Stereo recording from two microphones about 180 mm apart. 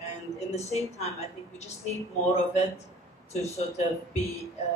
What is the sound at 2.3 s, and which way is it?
Speech, 40° left (ahead or behind).